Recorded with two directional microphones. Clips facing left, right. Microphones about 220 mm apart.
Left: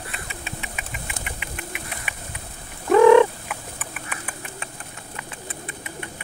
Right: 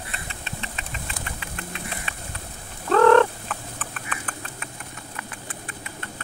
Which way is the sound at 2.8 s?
10° left (ahead or behind).